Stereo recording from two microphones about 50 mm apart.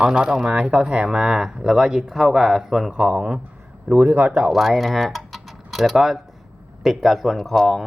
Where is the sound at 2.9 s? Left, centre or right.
Right.